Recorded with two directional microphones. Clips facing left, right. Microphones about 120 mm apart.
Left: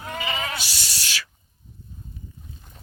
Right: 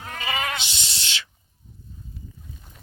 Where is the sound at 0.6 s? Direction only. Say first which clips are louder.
Even; 20° right (ahead or behind).